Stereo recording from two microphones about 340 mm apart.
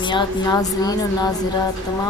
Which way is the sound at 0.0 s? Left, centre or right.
Centre.